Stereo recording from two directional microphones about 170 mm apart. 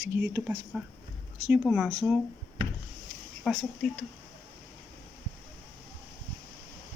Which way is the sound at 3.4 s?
5° left (ahead or behind).